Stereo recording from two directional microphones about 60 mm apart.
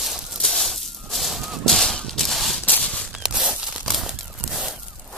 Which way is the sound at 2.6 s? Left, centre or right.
Left.